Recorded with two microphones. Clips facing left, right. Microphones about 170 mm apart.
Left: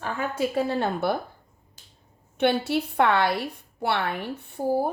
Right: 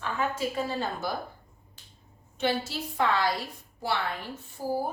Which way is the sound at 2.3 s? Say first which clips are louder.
Left 6 dB; 60° left (ahead or behind).